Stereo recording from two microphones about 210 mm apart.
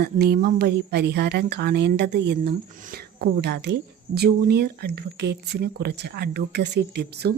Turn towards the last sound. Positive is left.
turn(degrees=-50)  # may be behind; listen again after turning